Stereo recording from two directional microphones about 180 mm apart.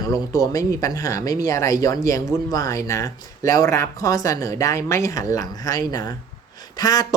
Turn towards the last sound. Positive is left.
turn(degrees=20)  # may be behind; listen again after turning